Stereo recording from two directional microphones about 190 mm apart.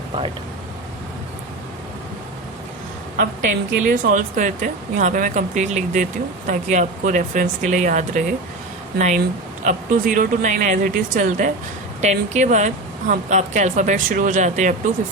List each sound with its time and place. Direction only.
3.2 s speech: 45° right (ahead or behind)